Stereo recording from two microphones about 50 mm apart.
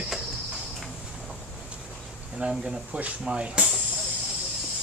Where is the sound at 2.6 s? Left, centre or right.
Centre.